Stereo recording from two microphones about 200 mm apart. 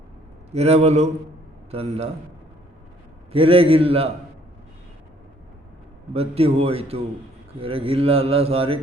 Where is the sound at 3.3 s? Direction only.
30° right (ahead or behind).